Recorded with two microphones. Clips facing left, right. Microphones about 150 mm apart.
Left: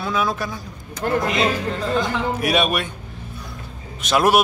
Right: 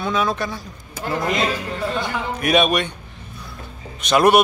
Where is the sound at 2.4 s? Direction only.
Centre (ahead or behind).